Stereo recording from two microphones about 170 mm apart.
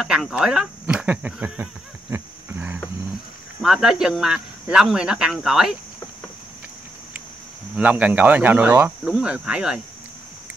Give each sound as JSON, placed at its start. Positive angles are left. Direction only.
{"t": 0.0, "sound": "a sound", "side_deg": -5}
{"t": 3.6, "sound": "speech", "side_deg": -5}
{"t": 7.7, "sound": "speech", "side_deg": -10}